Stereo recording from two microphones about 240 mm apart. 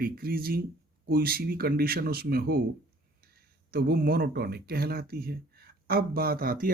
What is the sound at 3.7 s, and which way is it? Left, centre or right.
Speech, right.